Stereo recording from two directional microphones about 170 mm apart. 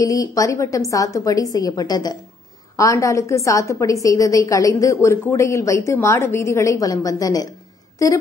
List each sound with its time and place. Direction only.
0.0 s a woman's voice: 20° left (ahead or behind)